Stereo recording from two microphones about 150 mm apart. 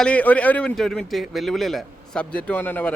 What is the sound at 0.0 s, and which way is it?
A man's voice, 10° left (ahead or behind).